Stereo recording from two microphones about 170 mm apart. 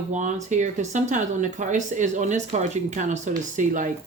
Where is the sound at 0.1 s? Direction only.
45° right (ahead or behind).